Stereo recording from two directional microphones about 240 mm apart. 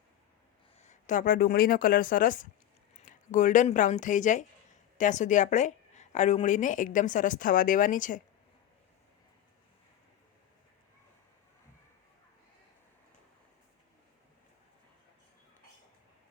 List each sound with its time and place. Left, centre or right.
0.8 s a woman's voice: left